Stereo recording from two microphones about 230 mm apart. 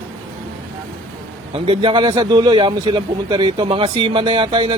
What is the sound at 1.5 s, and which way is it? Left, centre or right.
A man's voice, right.